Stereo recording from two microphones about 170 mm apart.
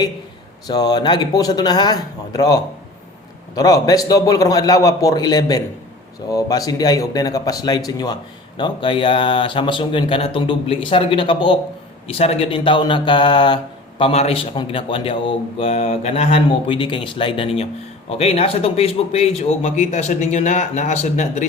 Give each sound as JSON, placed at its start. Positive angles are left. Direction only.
{"t": 0.7, "sound": "speech", "side_deg": 25}